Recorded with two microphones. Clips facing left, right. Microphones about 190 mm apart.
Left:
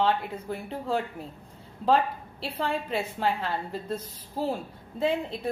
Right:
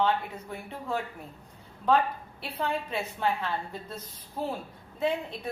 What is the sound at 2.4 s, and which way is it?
A woman's voice, 30° left (ahead or behind).